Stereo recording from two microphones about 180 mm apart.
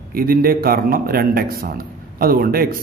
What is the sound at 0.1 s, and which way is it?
A man's voice, 55° right (ahead or behind).